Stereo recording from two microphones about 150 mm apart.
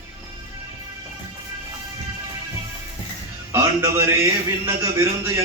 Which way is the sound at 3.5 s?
20° right (ahead or behind).